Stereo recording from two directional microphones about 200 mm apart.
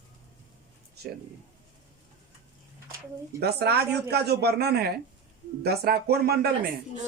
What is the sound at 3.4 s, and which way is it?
Speech, 55° right (ahead or behind).